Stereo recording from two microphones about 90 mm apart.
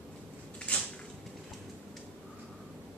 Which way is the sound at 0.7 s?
15° left (ahead or behind).